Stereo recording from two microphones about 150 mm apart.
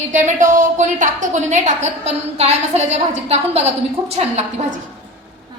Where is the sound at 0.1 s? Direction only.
55° right (ahead or behind).